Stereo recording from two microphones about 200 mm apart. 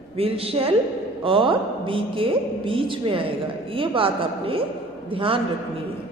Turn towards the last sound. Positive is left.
turn(degrees=-25)  # may be behind; listen again after turning